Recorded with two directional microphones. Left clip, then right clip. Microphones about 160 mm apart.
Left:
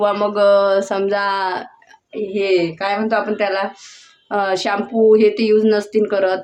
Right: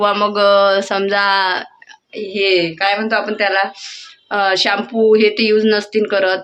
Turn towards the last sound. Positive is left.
turn(degrees=10)  # may be behind; listen again after turning